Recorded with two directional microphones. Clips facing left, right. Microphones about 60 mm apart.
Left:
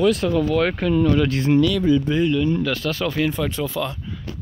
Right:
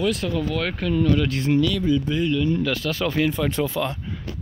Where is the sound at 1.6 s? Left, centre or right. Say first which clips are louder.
Left 3 dB; left.